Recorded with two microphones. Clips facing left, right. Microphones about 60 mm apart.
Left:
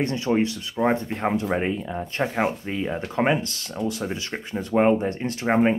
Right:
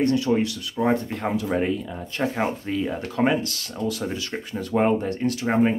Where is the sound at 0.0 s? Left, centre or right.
Left.